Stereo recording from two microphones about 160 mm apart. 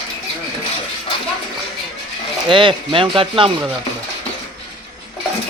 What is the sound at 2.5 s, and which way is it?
Speech, 30° right (ahead or behind).